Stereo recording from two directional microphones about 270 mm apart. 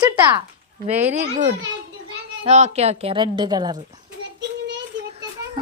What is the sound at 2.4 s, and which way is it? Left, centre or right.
A woman's voice, right.